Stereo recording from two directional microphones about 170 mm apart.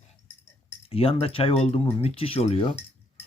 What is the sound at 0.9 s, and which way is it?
Speech, 35° left (ahead or behind).